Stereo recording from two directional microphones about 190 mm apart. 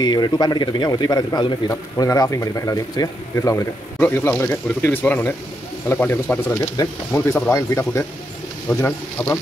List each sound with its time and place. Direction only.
0.0 s speech: 20° left (ahead or behind)